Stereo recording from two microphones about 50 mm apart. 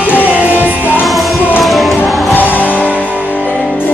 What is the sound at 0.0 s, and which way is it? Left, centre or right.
Music, left.